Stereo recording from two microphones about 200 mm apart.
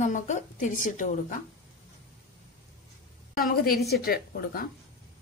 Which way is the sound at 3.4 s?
50° left (ahead or behind).